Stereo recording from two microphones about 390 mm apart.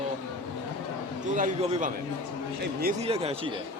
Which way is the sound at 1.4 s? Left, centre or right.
Centre.